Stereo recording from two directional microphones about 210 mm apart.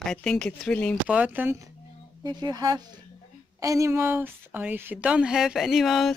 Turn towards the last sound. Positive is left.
turn(degrees=0)  # may be behind; listen again after turning